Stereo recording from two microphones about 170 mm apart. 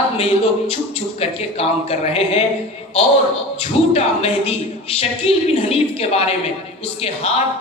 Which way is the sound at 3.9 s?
35° left (ahead or behind).